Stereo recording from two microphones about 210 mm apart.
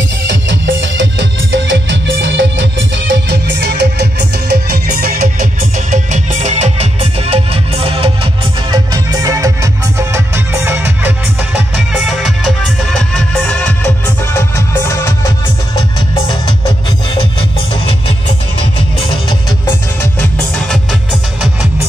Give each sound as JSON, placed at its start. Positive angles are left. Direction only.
{"t": 0.3, "sound": "music", "side_deg": -60}
{"t": 14.9, "sound": "music", "side_deg": 15}
{"t": 17.4, "sound": "music", "side_deg": 25}
{"t": 20.0, "sound": "music", "side_deg": 5}